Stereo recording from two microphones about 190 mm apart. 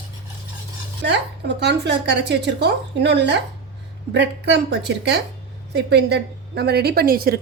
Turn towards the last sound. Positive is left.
turn(degrees=-50)  # may be behind; listen again after turning